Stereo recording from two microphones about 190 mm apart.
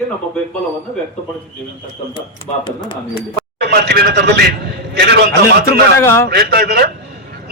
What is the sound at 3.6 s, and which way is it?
A man's voice, 60° right (ahead or behind).